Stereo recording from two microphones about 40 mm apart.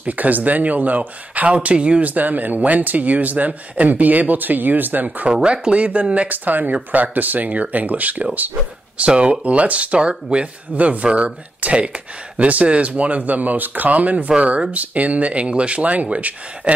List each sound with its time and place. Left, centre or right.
0.0 s speech: right
5.2 s speech: right
6.3 s speech: right
8.9 s speech: right
14.3 s speech: right